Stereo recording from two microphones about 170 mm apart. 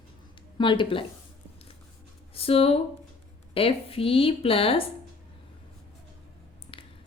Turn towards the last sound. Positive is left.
turn(degrees=30)  # may be behind; listen again after turning